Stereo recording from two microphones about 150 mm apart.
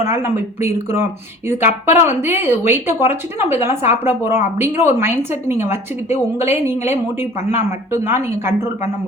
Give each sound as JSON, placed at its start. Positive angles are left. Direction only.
{"t": 0.0, "sound": "speech", "side_deg": -15}